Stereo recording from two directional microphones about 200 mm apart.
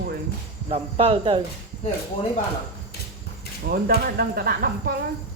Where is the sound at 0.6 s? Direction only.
30° right (ahead or behind).